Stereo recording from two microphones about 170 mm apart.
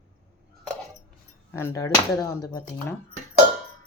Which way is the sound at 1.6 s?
15° left (ahead or behind).